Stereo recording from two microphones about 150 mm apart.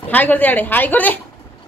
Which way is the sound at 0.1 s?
10° left (ahead or behind).